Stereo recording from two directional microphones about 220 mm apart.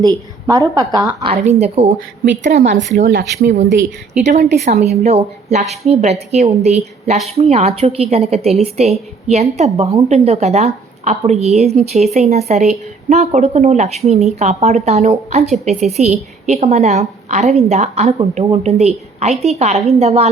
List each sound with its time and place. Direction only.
0.0 s a woman's voice: 15° right (ahead or behind); by 2.6 s 30° right (ahead or behind)
2.6 s speech: 55° right (ahead or behind)
4.2 s a woman's voice: 30° right (ahead or behind)